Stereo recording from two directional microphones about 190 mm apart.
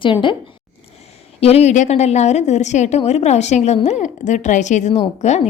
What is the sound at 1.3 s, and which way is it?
A woman's voice, 30° left (ahead or behind).